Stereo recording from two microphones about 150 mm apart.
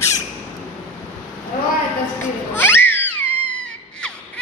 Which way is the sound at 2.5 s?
15° left (ahead or behind).